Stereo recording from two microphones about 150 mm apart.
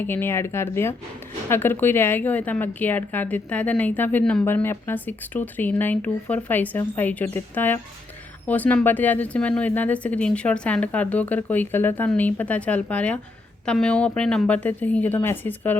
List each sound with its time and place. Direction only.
0.0 s speech: 15° left (ahead or behind)